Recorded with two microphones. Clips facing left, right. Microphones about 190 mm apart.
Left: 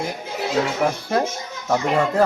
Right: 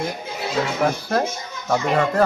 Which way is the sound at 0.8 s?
Centre (ahead or behind).